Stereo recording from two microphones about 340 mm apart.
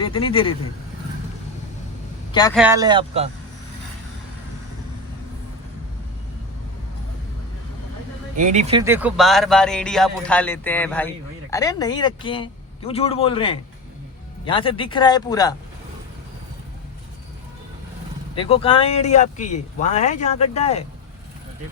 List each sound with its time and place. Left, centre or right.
0.0 s speech: centre
2.6 s speech: centre
8.4 s a man's voice: right; by 15.5 s centre
18.3 s speech: centre